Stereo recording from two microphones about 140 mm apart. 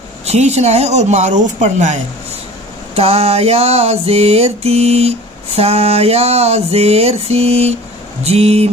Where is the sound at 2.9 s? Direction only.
45° right (ahead or behind).